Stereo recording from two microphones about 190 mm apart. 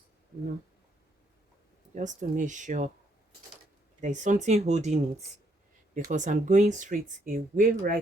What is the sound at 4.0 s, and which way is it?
Speech, 40° right (ahead or behind).